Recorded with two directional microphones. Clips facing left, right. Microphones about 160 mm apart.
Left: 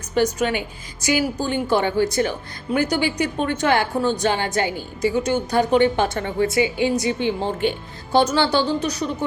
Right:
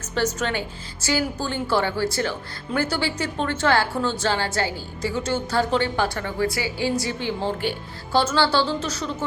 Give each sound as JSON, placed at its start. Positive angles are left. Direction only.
{"t": 0.1, "sound": "a woman's voice", "side_deg": 10}